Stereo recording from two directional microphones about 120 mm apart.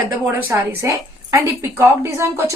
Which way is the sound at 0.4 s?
20° right (ahead or behind).